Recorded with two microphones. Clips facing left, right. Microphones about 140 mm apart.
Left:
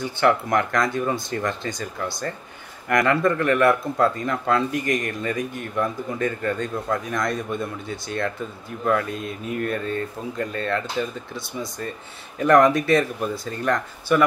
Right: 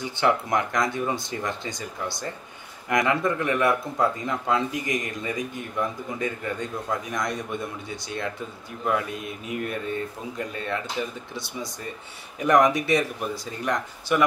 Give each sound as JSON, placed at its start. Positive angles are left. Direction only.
{"t": 0.0, "sound": "speech", "side_deg": -15}
{"t": 2.9, "sound": "speech", "side_deg": -15}
{"t": 12.4, "sound": "speech", "side_deg": -15}